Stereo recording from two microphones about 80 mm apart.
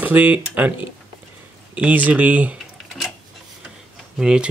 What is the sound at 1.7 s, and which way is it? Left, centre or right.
Speech, centre.